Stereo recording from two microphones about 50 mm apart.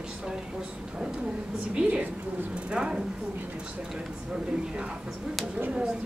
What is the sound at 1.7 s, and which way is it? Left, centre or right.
A woman's voice, right.